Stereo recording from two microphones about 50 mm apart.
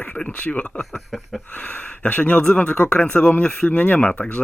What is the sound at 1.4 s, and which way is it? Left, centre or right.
Speech, left.